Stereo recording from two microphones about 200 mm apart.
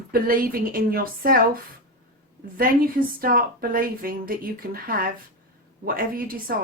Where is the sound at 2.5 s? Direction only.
45° right (ahead or behind).